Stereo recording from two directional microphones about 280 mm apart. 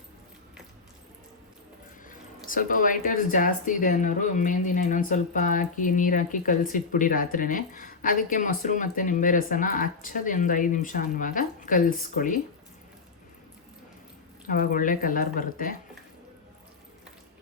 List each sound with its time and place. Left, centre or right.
2.0 s speech: left
14.4 s speech: left